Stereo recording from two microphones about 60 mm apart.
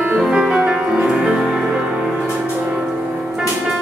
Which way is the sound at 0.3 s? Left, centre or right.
Centre.